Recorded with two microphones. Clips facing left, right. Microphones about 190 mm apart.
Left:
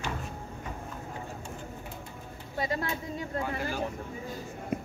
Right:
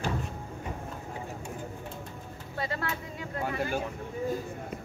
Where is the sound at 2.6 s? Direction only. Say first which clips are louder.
Left 2 dB; 15° left (ahead or behind).